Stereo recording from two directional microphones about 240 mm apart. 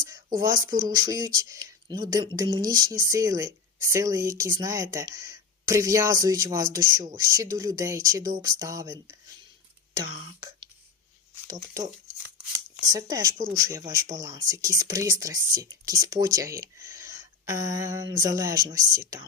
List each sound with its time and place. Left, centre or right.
0.0 s a woman's voice: centre
9.9 s throat clearing: centre
11.4 s speech: centre
12.9 s a woman's voice: centre
13.3 s speech: right
13.6 s a woman's voice: centre